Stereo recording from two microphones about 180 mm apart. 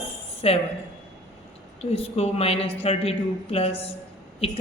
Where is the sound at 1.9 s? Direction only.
35° left (ahead or behind).